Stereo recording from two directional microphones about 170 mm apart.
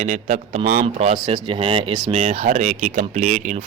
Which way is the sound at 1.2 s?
30° right (ahead or behind).